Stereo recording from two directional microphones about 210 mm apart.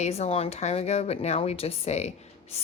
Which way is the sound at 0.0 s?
30° left (ahead or behind).